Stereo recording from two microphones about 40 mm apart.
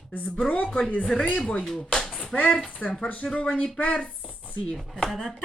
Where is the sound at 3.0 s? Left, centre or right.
Left.